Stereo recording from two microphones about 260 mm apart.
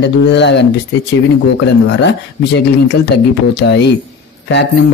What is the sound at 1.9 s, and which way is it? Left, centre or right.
Speech, left.